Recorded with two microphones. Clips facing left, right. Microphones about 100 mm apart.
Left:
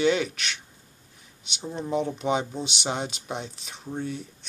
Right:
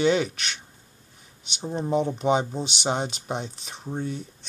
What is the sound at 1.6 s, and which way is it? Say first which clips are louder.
Speech: right 3 dB; 30° right (ahead or behind).